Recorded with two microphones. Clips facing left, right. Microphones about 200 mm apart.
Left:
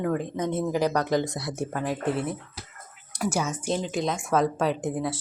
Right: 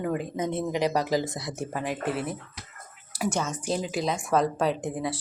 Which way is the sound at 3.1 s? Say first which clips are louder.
Left 1 dB; centre (ahead or behind).